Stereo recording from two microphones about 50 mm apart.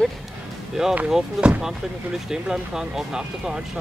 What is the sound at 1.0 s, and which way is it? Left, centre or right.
Speech, centre.